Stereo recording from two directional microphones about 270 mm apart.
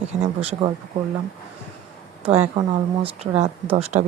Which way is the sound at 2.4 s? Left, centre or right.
Right.